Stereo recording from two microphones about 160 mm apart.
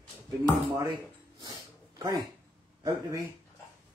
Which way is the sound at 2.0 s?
25° right (ahead or behind).